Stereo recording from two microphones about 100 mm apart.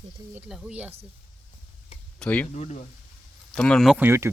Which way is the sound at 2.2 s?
15° left (ahead or behind).